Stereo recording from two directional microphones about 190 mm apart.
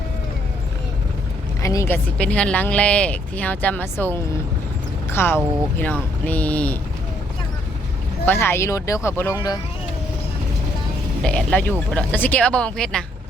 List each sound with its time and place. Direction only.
1.6 s speech: 15° left (ahead or behind)
8.2 s speech: 10° left (ahead or behind)
11.2 s speech: 5° left (ahead or behind)